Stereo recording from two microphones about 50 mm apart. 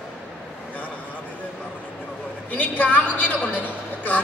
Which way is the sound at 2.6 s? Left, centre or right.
Left.